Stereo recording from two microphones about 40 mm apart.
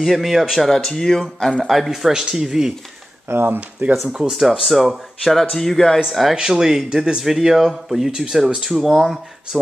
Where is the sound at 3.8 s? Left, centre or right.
Right.